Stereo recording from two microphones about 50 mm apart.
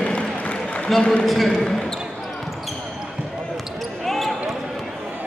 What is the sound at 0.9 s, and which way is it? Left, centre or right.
Speech, centre.